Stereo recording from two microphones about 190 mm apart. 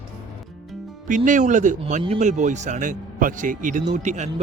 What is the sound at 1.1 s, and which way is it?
Speech, 40° right (ahead or behind).